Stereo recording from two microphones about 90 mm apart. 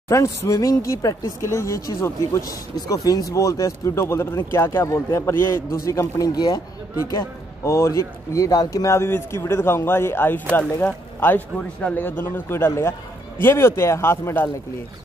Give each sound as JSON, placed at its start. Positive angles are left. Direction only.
{"t": 0.1, "sound": "speech", "side_deg": 35}
{"t": 2.7, "sound": "speech", "side_deg": 45}
{"t": 7.6, "sound": "speech", "side_deg": 30}